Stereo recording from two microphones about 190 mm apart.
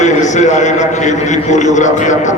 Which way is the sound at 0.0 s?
40° left (ahead or behind).